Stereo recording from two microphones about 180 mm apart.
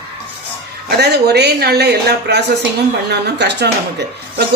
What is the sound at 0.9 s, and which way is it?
A woman's voice, 65° right (ahead or behind).